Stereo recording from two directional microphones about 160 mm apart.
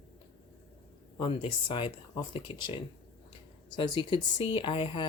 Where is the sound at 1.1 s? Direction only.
30° left (ahead or behind).